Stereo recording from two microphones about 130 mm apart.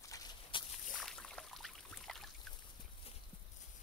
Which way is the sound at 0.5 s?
40° left (ahead or behind).